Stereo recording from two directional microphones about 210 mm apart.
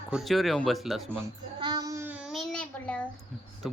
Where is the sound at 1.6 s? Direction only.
20° right (ahead or behind); by 3.1 s 5° left (ahead or behind).